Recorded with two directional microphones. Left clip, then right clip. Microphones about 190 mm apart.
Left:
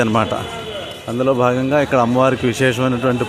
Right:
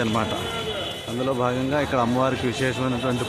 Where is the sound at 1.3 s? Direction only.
30° left (ahead or behind).